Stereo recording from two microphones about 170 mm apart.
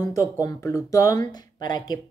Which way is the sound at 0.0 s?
20° left (ahead or behind).